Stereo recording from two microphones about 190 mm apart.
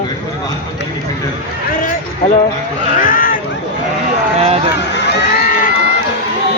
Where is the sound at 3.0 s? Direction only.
45° left (ahead or behind).